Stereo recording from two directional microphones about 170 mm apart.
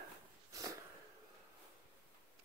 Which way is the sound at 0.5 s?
20° right (ahead or behind).